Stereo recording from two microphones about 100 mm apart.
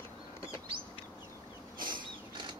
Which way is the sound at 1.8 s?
50° right (ahead or behind).